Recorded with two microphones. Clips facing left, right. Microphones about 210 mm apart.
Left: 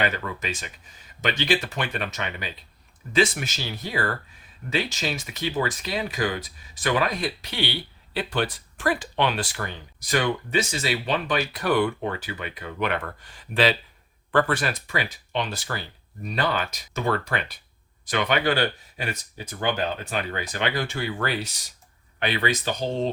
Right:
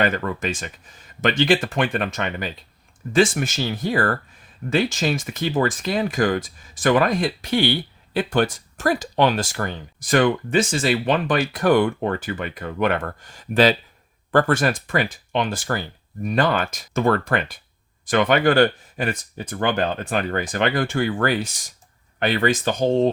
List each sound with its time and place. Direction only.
0.0 s speech: 50° right (ahead or behind)